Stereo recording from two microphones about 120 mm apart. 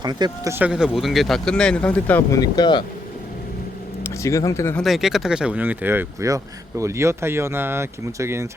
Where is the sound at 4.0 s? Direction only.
25° left (ahead or behind).